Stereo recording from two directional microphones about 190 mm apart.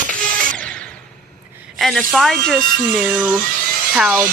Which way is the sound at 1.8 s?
Centre (ahead or behind).